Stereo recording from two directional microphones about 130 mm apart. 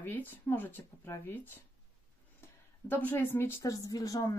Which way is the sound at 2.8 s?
15° left (ahead or behind).